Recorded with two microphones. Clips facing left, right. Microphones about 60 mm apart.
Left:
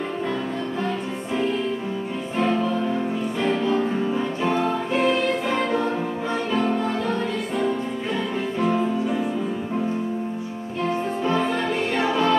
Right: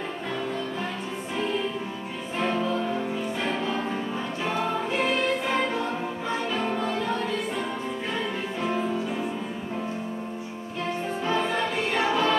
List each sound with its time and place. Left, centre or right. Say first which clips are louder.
4.4 s music: left 2 dB; centre
11.3 s music: left 2 dB; centre